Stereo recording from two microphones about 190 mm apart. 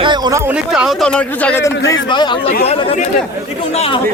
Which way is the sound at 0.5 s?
5° right (ahead or behind).